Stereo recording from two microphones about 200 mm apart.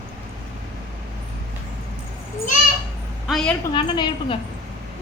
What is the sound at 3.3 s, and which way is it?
Speech, 5° left (ahead or behind).